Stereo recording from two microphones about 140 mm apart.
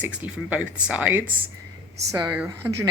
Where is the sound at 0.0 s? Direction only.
10° right (ahead or behind).